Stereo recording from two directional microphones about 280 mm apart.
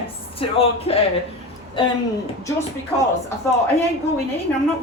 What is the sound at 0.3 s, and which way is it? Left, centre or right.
Speech, left.